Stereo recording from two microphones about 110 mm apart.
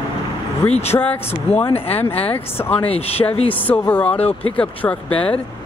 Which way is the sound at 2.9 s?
65° left (ahead or behind).